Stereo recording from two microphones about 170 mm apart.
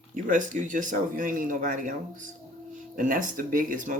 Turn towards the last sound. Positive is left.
turn(degrees=-50)  # may be behind; listen again after turning